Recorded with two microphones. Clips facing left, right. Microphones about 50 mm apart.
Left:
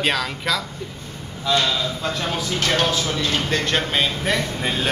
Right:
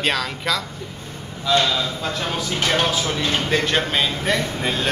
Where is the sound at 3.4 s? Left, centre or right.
Centre.